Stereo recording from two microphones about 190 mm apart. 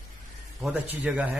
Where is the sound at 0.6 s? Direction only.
10° right (ahead or behind).